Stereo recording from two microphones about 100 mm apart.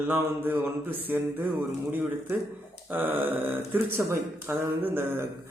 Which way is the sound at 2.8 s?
20° right (ahead or behind).